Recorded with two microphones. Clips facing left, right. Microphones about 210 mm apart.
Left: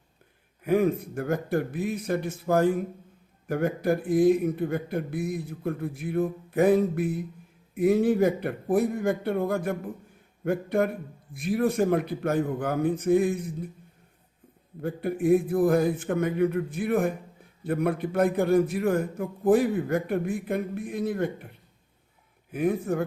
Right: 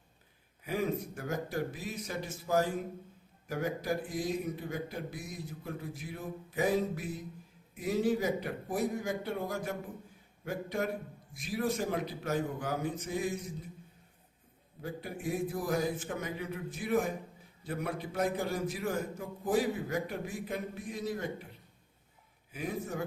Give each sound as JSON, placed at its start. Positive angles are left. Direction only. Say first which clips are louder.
{"t": 0.6, "sound": "a man's voice", "louder": "left 10 dB", "side_deg": 55}
{"t": 14.8, "sound": "a man's voice", "louder": "left 12 dB", "side_deg": 55}
{"t": 22.5, "sound": "a man's voice", "louder": "left 11 dB", "side_deg": 55}